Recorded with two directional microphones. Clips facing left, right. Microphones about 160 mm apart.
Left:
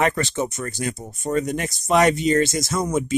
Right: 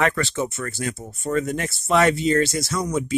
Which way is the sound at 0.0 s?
20° left (ahead or behind).